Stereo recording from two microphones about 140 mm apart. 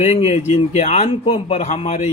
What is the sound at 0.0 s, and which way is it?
A man's voice, 50° left (ahead or behind).